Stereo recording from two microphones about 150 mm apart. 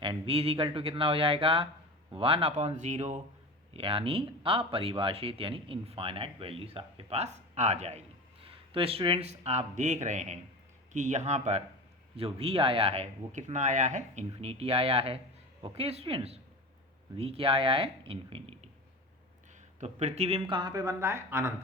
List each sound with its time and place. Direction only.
0.0 s speech: 35° right (ahead or behind)
3.8 s speech: 40° right (ahead or behind); by 14.3 s 55° right (ahead or behind)
14.4 s speech: 40° right (ahead or behind)
19.8 s speech: 45° right (ahead or behind); by 21.5 s 15° right (ahead or behind)